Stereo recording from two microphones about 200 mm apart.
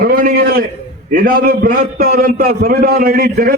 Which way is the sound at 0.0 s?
45° right (ahead or behind).